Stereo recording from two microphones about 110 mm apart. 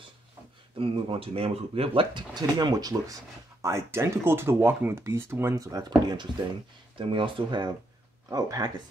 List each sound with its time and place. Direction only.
0.7 s speech: 60° right (ahead or behind)
2.3 s speech: 35° right (ahead or behind)
7.0 s speech: 50° right (ahead or behind)
8.3 s speech: 35° right (ahead or behind)